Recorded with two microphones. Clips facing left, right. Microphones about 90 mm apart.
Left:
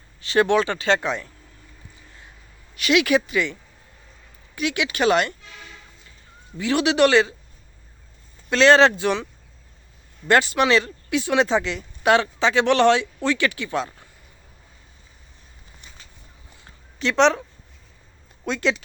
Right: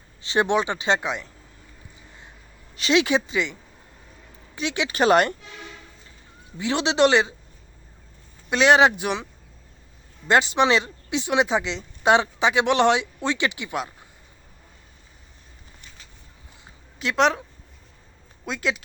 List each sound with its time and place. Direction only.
0.2 s speech: 20° right (ahead or behind)
2.7 s speech: 30° right (ahead or behind)
4.5 s speech: 30° right (ahead or behind)
6.6 s speech: 20° right (ahead or behind)
8.4 s speech: 15° right (ahead or behind)
10.2 s speech: 20° right (ahead or behind)
16.6 s a sound: 5° right (ahead or behind)
18.4 s speech: 5° right (ahead or behind)